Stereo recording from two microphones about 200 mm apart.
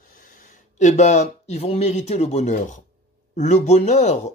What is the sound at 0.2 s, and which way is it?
Speech, 35° left (ahead or behind).